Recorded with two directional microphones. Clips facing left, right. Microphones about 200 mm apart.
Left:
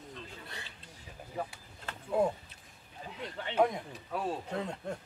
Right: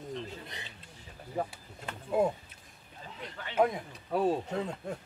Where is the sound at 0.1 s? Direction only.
20° right (ahead or behind).